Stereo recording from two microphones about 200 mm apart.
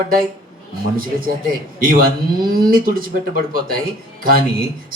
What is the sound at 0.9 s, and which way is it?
A man's voice, 45° right (ahead or behind).